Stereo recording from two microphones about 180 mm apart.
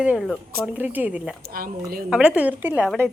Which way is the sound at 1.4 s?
55° right (ahead or behind).